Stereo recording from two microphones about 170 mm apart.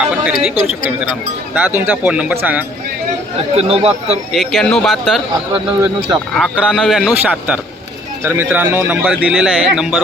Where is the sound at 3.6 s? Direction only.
35° right (ahead or behind).